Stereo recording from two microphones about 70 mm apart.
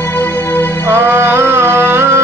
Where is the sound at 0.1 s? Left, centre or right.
Left.